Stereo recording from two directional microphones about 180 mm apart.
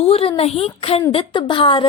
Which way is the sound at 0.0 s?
35° left (ahead or behind).